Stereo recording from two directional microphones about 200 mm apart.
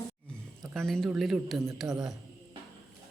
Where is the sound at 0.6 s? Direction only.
Centre (ahead or behind).